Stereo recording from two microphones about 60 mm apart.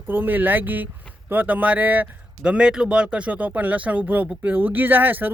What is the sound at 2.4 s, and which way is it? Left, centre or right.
Speech, centre.